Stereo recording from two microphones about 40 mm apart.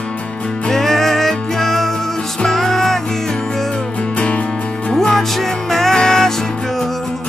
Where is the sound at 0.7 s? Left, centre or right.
Centre.